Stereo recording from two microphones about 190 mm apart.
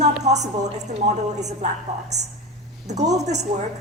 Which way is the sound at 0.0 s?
35° right (ahead or behind).